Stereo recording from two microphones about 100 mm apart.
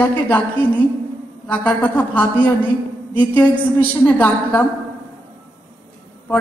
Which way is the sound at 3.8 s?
15° left (ahead or behind).